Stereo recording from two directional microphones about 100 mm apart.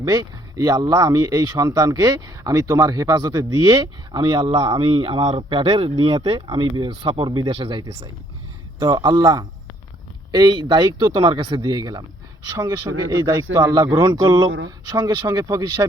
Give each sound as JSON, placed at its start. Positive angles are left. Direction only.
{"t": 0.1, "sound": "speech", "side_deg": -45}
{"t": 8.8, "sound": "speech", "side_deg": -40}
{"t": 13.7, "sound": "speech", "side_deg": -35}